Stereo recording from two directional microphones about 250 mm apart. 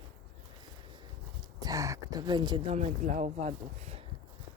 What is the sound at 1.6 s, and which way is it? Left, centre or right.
Speech, centre.